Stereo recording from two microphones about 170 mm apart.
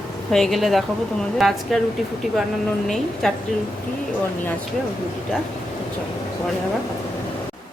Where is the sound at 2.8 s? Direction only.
Centre (ahead or behind).